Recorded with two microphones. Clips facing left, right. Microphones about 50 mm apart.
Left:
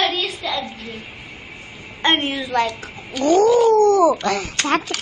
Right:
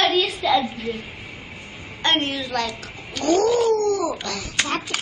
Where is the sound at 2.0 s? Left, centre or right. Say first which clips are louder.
Left 3 dB; centre.